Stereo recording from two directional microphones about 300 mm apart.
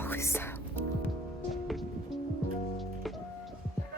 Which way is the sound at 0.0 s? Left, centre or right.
Centre.